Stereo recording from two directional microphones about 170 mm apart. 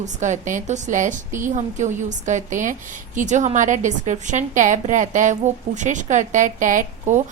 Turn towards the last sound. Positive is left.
turn(degrees=-45)  # may be behind; listen again after turning